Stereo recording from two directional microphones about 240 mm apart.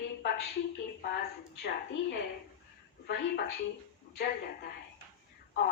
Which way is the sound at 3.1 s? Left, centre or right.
Left.